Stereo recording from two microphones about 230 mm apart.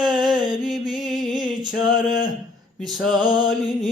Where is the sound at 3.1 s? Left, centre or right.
Centre.